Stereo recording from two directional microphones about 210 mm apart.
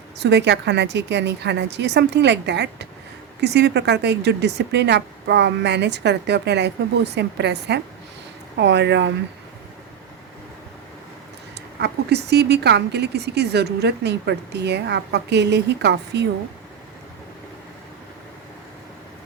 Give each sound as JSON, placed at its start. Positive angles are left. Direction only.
{"t": 0.2, "sound": "a woman's voice", "side_deg": -55}
{"t": 11.8, "sound": "speech", "side_deg": -50}